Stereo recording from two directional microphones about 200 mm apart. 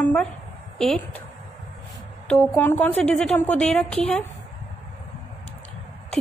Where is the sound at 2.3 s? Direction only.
10° left (ahead or behind).